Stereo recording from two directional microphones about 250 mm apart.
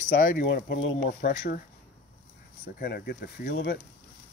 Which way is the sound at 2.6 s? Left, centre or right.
Left.